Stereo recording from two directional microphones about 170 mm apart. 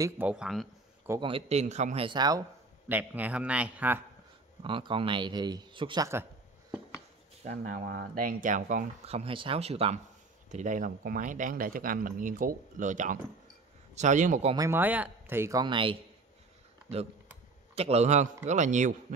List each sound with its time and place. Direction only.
0.0 s speech: 10° right (ahead or behind)
1.2 s speech: 35° right (ahead or behind)
2.0 s a man's voice: 25° right (ahead or behind)
2.9 s a man's voice: 10° right (ahead or behind)
4.6 s a man's voice: 30° right (ahead or behind)
7.4 s speech: 60° right (ahead or behind)
9.0 s speech: 35° right (ahead or behind)
10.5 s speech: 45° right (ahead or behind)
14.5 s a man's voice: 15° right (ahead or behind)
15.6 s a man's voice: 30° right (ahead or behind)
17.7 s speech: 40° right (ahead or behind)